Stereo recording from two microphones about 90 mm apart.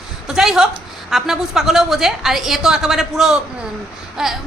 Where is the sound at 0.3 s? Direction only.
5° right (ahead or behind).